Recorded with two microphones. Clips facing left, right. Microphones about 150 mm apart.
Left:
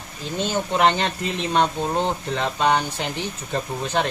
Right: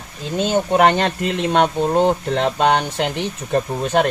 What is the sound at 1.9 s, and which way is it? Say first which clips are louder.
Speech: right 7 dB; 50° right (ahead or behind).